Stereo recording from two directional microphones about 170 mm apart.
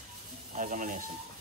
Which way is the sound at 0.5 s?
50° right (ahead or behind).